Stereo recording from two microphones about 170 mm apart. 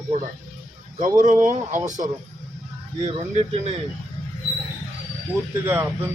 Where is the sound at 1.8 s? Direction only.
45° right (ahead or behind).